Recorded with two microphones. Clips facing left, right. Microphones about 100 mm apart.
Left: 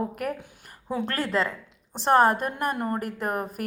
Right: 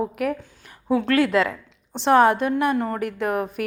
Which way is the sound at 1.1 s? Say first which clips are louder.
Right 7 dB; 35° left (ahead or behind).